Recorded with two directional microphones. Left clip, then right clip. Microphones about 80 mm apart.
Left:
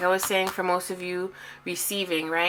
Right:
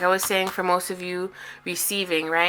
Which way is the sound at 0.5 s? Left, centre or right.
Right.